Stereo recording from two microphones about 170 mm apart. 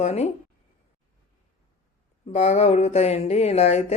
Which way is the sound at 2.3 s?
40° left (ahead or behind).